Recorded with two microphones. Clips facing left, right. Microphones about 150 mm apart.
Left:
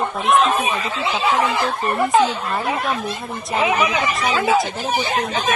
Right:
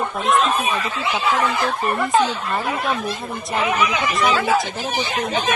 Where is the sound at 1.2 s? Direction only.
20° left (ahead or behind).